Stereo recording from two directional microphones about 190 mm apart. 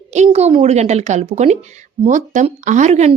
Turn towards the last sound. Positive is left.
turn(degrees=-35)  # may be behind; listen again after turning